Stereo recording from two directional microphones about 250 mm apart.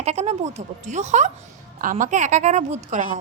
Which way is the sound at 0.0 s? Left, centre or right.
Right.